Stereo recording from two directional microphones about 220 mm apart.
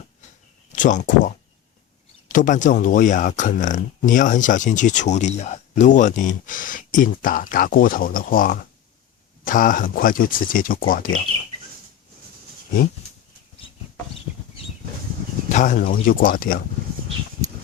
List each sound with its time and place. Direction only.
0.8 s speech: 35° left (ahead or behind)
15.5 s speech: 35° left (ahead or behind)